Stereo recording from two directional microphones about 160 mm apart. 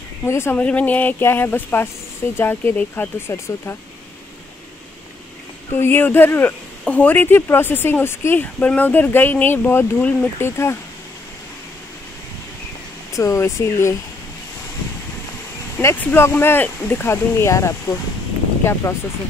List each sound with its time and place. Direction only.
0.2 s speech: 15° left (ahead or behind)
5.8 s speech: 15° left (ahead or behind)
13.1 s speech: 20° left (ahead or behind)
15.8 s speech: 15° left (ahead or behind)